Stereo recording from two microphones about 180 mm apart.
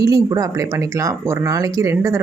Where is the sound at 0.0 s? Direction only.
20° right (ahead or behind).